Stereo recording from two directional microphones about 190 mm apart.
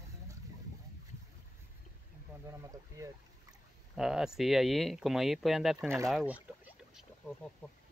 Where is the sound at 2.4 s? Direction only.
15° right (ahead or behind).